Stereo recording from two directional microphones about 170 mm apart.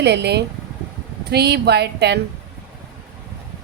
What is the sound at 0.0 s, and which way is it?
A woman's voice, 80° right.